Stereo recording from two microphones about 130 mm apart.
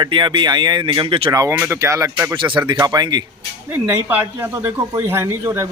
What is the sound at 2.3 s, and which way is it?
Speech, 40° right (ahead or behind).